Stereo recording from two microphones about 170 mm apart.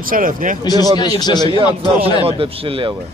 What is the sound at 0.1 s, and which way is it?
Speech, 55° right (ahead or behind).